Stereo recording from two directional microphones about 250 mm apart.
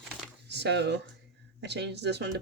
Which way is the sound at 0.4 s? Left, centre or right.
Right.